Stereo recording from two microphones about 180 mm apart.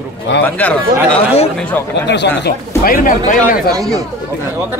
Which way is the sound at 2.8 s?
50° left (ahead or behind).